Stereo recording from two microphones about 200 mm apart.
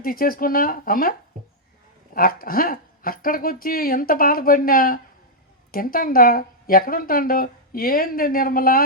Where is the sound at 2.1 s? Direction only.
45° left (ahead or behind).